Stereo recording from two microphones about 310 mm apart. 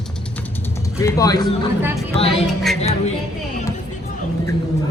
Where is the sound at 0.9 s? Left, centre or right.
Centre.